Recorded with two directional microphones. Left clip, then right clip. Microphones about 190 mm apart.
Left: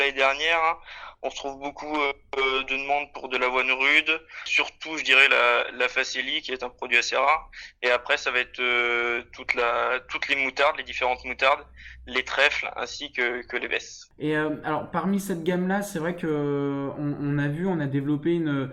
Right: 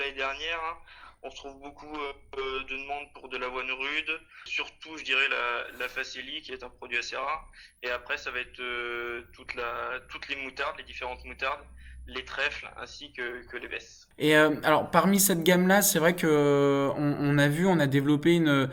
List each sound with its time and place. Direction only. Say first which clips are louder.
0.0 s speech: left 10 dB; 45° left (ahead or behind)
14.2 s speech: right 5 dB; 10° right (ahead or behind)